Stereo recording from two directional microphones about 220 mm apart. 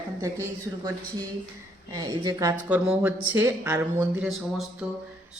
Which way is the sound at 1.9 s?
15° right (ahead or behind).